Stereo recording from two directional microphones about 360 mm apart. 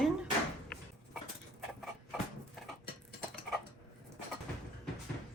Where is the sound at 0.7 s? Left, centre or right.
Centre.